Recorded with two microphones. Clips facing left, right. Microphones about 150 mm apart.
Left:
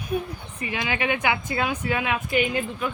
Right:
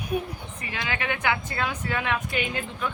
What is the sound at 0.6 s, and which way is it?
Speech, 15° left (ahead or behind).